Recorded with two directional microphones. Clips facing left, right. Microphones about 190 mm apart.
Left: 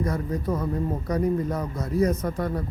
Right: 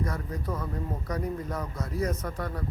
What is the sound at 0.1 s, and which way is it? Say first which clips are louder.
A man's voice: left 7 dB; 25° left (ahead or behind).